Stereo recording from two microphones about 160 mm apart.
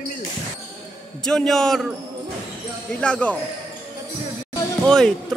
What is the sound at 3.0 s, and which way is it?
Speech, 10° left (ahead or behind).